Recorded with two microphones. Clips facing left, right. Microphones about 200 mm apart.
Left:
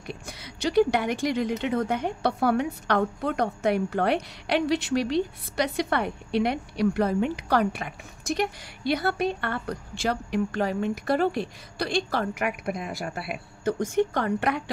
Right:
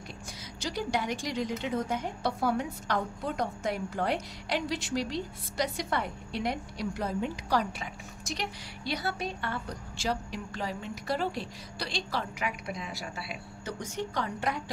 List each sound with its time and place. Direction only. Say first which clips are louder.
0.1 s a woman's voice: left 5 dB; 65° left (ahead or behind)